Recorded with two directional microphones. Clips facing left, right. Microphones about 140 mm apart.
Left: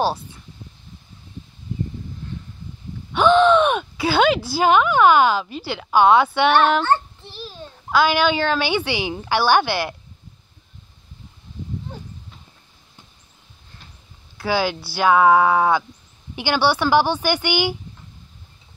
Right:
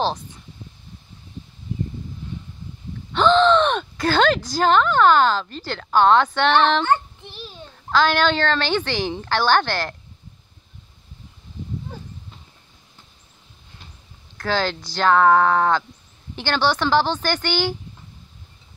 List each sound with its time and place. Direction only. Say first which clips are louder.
3.1 s speech: left 1 dB; 10° left (ahead or behind)
6.8 s child singing: even; 15° right (ahead or behind)
7.9 s a woman's voice: left 1 dB; 10° left (ahead or behind)
14.3 s a woman's voice: left 2 dB; 10° left (ahead or behind)